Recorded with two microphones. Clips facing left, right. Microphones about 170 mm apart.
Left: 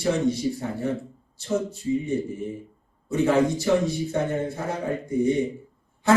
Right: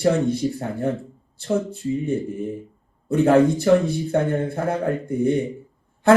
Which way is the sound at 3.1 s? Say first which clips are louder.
Right 5 dB; 55° right (ahead or behind).